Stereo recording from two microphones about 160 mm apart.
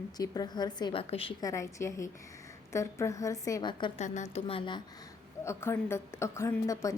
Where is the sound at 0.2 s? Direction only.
25° left (ahead or behind).